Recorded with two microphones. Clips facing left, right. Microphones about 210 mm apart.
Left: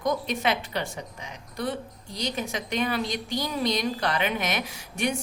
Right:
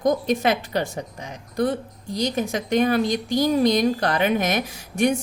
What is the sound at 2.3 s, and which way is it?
Speech, 45° right (ahead or behind).